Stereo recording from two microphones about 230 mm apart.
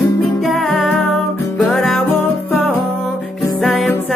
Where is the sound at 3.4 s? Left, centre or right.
Centre.